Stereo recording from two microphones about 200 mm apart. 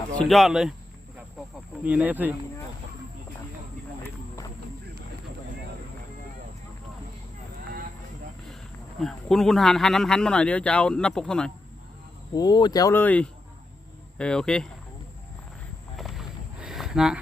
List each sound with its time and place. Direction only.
0.1 s speech: 5° left (ahead or behind)
1.8 s speech: 5° right (ahead or behind)
9.0 s speech: centre (ahead or behind)
12.3 s speech: 20° left (ahead or behind); by 14.7 s 5° left (ahead or behind)
16.0 s a sound: centre (ahead or behind)